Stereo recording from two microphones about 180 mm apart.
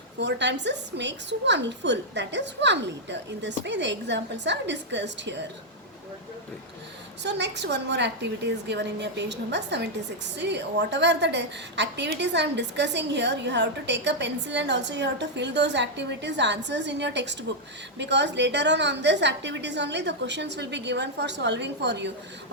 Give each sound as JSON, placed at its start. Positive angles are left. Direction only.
{"t": 0.2, "sound": "a woman's voice", "side_deg": -80}
{"t": 7.2, "sound": "a woman's voice", "side_deg": -75}